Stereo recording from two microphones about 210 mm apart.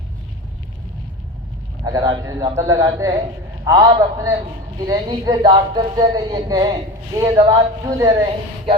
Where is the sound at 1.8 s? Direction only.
15° right (ahead or behind).